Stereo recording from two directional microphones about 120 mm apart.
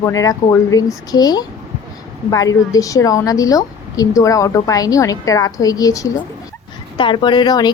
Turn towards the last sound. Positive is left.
turn(degrees=35)  # may be behind; listen again after turning